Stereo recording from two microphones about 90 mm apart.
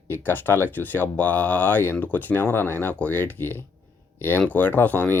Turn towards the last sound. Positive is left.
turn(degrees=15)  # may be behind; listen again after turning